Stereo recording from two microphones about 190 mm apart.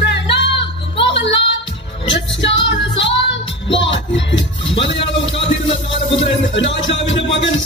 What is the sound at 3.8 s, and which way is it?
Music, 70° left (ahead or behind).